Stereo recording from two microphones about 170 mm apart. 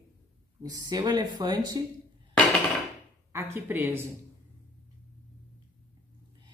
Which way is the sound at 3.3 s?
15° right (ahead or behind).